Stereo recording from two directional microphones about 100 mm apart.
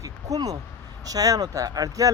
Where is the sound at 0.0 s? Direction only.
35° right (ahead or behind).